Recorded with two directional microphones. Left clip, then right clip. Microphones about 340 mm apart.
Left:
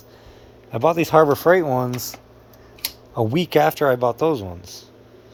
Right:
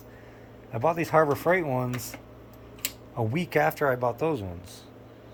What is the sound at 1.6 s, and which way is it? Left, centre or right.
Speech, left.